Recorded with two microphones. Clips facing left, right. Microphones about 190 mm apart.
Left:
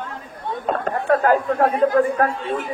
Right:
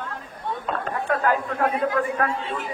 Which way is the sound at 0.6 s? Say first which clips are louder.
Left 7 dB; 45° left (ahead or behind).